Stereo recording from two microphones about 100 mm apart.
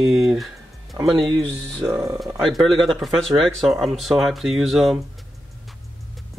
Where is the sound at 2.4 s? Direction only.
Centre (ahead or behind).